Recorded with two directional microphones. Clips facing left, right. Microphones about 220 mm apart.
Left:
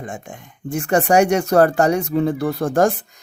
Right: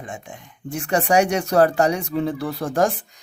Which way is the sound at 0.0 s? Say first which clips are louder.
Left 3 dB; 50° left (ahead or behind).